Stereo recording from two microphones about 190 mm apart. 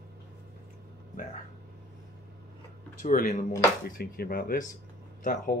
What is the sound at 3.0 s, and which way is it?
Speech, 45° left (ahead or behind).